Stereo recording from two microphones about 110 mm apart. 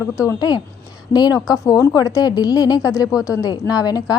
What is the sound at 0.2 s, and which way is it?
A woman's voice, 35° left (ahead or behind).